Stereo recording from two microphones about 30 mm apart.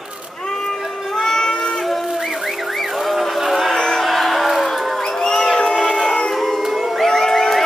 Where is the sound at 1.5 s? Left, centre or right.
Left.